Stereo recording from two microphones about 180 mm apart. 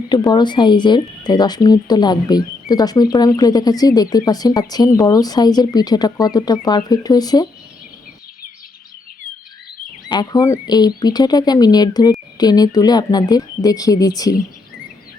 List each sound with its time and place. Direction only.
0.1 s speech: 25° left (ahead or behind)
10.1 s speech: 20° left (ahead or behind)